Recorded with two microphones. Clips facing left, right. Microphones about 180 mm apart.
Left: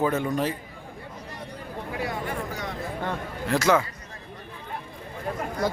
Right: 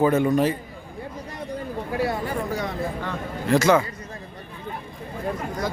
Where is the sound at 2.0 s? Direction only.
35° right (ahead or behind).